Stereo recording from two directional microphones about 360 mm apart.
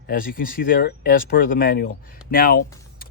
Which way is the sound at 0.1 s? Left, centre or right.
Left.